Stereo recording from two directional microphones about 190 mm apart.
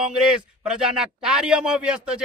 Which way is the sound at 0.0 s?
5° right (ahead or behind).